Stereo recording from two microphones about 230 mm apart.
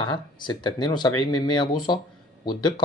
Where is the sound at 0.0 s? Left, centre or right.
Centre.